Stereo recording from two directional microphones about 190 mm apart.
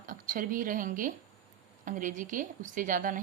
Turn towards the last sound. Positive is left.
turn(degrees=-45)  # may be behind; listen again after turning